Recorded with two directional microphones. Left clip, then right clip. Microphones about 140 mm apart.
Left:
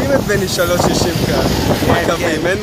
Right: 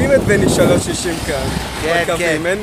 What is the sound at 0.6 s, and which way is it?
Speech, 5° right (ahead or behind).